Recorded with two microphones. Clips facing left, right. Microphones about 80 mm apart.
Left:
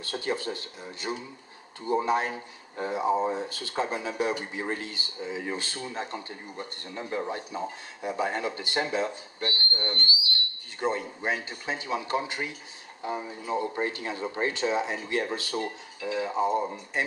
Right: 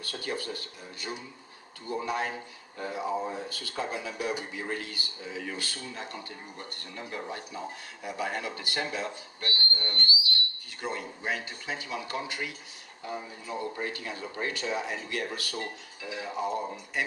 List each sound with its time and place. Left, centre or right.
0.0 s speech: left